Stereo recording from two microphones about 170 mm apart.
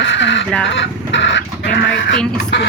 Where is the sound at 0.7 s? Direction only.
90° left.